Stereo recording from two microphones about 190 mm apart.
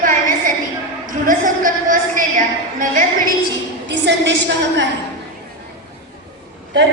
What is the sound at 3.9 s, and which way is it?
Speech, 65° right (ahead or behind).